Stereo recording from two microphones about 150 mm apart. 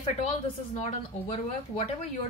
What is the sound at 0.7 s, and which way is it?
Speech, 45° left (ahead or behind).